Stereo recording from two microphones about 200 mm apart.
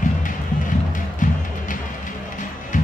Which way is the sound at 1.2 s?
40° left (ahead or behind).